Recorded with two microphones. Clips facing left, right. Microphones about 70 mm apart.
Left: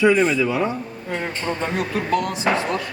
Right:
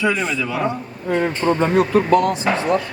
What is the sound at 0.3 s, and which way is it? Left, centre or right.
Speech, centre.